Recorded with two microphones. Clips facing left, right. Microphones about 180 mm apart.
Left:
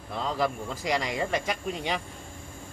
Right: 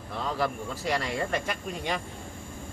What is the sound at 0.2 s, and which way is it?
Speech, 15° left (ahead or behind).